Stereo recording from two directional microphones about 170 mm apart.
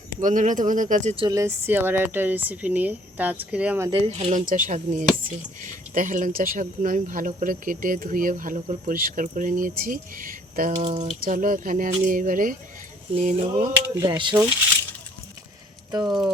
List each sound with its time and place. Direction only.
0.2 s speech: 50° right (ahead or behind)
1.1 s speech: 30° right (ahead or behind)
1.4 s speech: 15° right (ahead or behind)
3.8 s speech: 35° right (ahead or behind)
11.2 s speech: 55° right (ahead or behind)
13.1 s a sound: 40° right (ahead or behind)
13.9 s speech: 20° right (ahead or behind)